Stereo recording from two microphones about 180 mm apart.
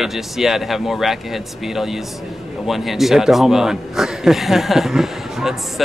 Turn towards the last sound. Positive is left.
turn(degrees=0)  # may be behind; listen again after turning